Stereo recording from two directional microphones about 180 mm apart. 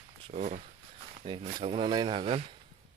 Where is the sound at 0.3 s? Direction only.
40° right (ahead or behind).